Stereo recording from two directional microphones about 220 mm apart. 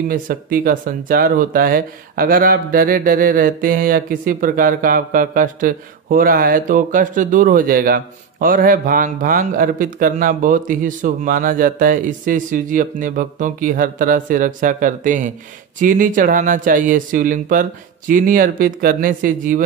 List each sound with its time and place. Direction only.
0.1 s speech: 40° right (ahead or behind)